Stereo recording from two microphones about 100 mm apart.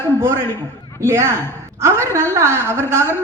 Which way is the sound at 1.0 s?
25° right (ahead or behind).